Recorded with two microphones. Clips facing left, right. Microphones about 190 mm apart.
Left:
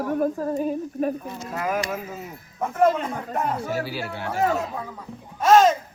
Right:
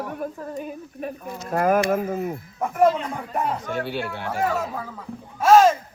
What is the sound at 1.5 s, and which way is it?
Speech, 55° right (ahead or behind).